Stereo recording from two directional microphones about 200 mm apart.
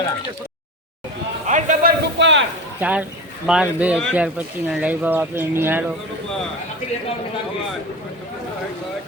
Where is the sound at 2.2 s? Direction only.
65° right (ahead or behind).